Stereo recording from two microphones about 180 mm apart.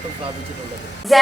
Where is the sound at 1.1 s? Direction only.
Centre (ahead or behind).